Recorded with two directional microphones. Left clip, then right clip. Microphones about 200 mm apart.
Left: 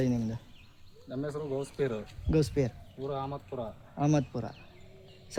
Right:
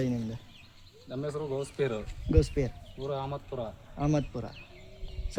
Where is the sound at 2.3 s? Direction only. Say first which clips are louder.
Even; 50° left (ahead or behind).